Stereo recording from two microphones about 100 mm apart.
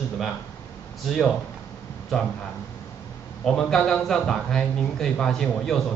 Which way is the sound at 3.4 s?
5° left (ahead or behind).